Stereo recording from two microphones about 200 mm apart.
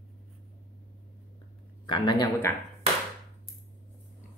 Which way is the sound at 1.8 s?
20° left (ahead or behind).